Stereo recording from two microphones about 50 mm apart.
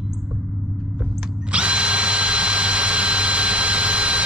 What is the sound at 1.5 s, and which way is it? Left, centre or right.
Drill, right.